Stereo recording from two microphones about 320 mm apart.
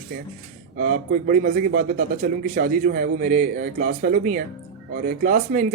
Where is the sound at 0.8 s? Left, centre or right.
Right.